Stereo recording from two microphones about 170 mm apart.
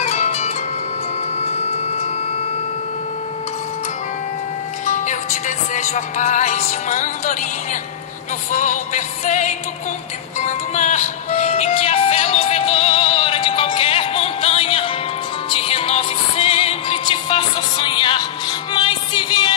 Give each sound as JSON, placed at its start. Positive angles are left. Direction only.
{"t": 0.0, "sound": "music", "side_deg": 45}
{"t": 4.8, "sound": "music", "side_deg": 45}
{"t": 8.5, "sound": "music", "side_deg": 45}